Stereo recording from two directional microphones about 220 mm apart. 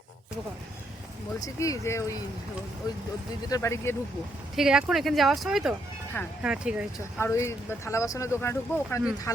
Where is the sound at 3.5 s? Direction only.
15° left (ahead or behind).